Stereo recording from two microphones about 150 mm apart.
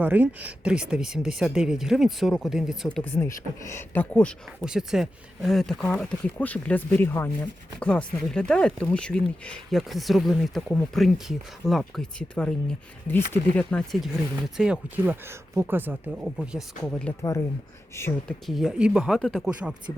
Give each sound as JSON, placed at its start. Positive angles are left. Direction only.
{"t": 0.0, "sound": "speech", "side_deg": -10}
{"t": 3.0, "sound": "speech", "side_deg": 15}
{"t": 4.6, "sound": "speech", "side_deg": -5}
{"t": 16.8, "sound": "speech", "side_deg": 5}
{"t": 18.0, "sound": "speech", "side_deg": 20}
{"t": 18.3, "sound": "speech", "side_deg": 0}